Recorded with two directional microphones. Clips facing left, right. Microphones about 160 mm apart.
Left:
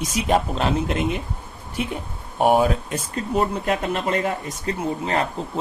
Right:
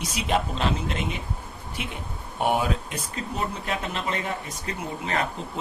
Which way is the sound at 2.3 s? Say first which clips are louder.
Left 7 dB; 45° left (ahead or behind).